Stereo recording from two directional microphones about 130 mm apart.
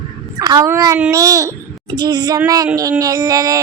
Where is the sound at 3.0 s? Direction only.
25° right (ahead or behind).